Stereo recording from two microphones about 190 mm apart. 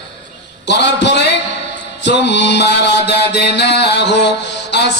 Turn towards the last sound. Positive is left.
turn(degrees=65)  # may be behind; listen again after turning